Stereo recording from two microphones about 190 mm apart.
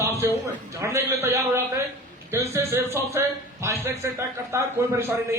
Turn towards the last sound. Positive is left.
turn(degrees=-15)  # may be behind; listen again after turning